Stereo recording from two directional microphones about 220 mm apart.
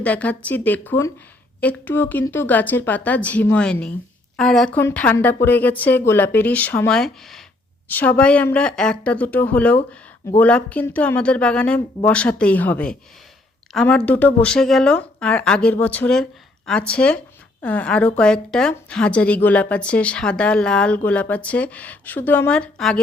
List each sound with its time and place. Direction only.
0.0 s a woman's voice: 5° left (ahead or behind)